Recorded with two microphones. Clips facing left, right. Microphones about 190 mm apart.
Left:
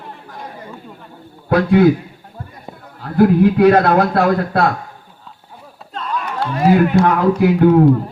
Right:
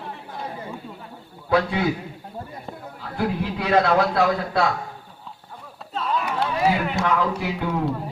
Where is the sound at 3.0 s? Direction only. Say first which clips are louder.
Left 13 dB; 50° left (ahead or behind).